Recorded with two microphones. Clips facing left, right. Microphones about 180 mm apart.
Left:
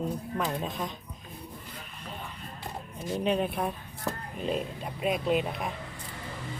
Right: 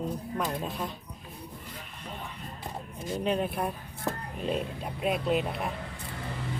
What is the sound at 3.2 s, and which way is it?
Speech, centre (ahead or behind).